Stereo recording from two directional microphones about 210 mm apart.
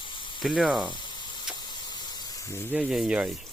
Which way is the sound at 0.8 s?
20° left (ahead or behind).